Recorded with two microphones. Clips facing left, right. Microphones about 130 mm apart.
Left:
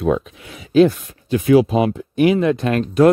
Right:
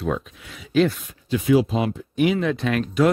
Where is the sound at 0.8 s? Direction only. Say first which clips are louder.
Left 6 dB; 50° left (ahead or behind).